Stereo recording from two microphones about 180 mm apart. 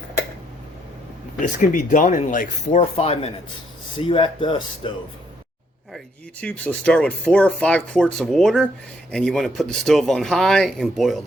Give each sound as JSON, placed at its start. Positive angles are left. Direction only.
{"t": 1.4, "sound": "speech", "side_deg": 45}
{"t": 6.4, "sound": "speech", "side_deg": 5}